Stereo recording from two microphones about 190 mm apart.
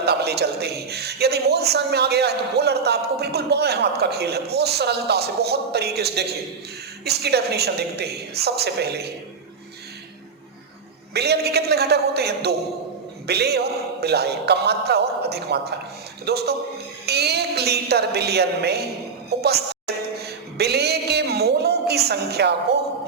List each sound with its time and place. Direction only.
0.0 s a man's voice: 60° right (ahead or behind)
11.1 s a man's voice: 60° right (ahead or behind)
20.1 s speech: 60° right (ahead or behind)